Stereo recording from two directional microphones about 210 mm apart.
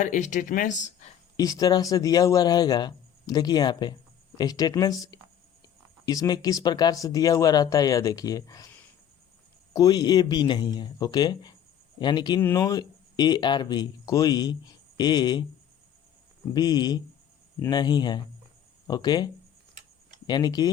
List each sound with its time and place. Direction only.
0.0 s speech: 35° left (ahead or behind)
1.4 s speech: 15° left (ahead or behind)
16.6 s speech: 20° left (ahead or behind)